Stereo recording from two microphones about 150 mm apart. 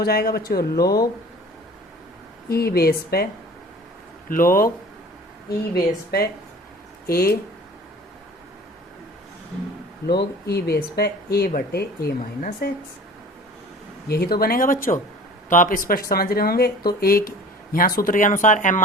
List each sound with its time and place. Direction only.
0.0 s speech: 90° left
2.5 s speech: 90° left
4.3 s speech: 70° left (ahead or behind)
5.5 s speech: 90° left
10.1 s speech: 90° left
14.1 s speech: 90° left; by 18.8 s 60° left (ahead or behind)